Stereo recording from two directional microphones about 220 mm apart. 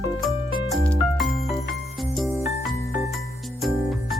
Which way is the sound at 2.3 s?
15° right (ahead or behind).